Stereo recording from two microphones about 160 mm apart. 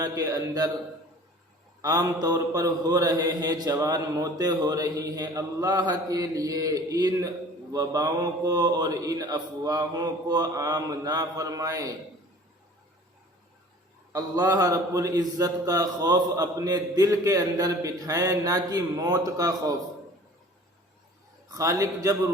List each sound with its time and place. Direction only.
0.0 s mantra: 20° right (ahead or behind)
1.8 s mantra: 25° right (ahead or behind)
14.1 s mantra: 20° right (ahead or behind)
21.5 s mantra: 20° right (ahead or behind)